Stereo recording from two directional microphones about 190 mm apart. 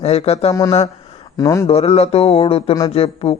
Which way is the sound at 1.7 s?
35° left (ahead or behind).